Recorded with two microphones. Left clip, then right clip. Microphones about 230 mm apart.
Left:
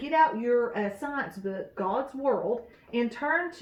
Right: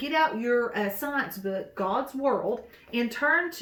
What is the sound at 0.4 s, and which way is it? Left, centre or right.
Speech, right.